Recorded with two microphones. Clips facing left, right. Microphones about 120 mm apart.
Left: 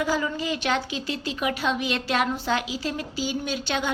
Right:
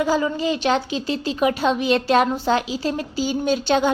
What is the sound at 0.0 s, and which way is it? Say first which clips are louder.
A woman's voice: right 6 dB; 30° right (ahead or behind).